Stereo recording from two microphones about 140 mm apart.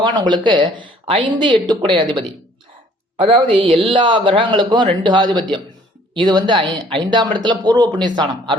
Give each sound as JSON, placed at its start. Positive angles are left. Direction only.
{"t": 0.0, "sound": "speech", "side_deg": -30}